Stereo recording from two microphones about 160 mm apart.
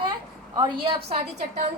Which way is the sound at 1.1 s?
45° right (ahead or behind).